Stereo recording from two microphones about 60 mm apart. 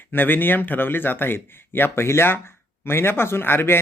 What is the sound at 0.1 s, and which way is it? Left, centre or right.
A man's voice, left.